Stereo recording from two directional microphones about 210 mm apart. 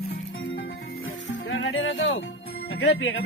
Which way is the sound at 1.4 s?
70° left (ahead or behind).